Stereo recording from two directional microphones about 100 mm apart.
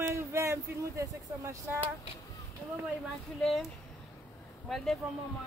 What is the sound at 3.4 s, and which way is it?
Speech, centre (ahead or behind).